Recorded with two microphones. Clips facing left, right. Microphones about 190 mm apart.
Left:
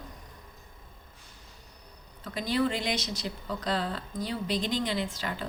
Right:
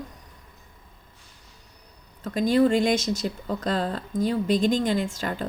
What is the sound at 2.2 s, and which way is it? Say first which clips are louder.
Speech: right 8 dB; 45° right (ahead or behind).